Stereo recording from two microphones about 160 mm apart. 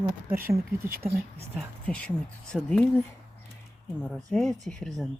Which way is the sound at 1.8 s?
5° left (ahead or behind).